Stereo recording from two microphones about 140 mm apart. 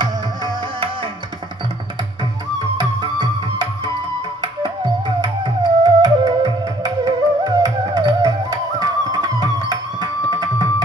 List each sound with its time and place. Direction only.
2.6 s music: 30° right (ahead or behind)